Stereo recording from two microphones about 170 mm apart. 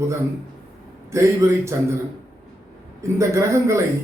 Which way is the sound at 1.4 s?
20° right (ahead or behind).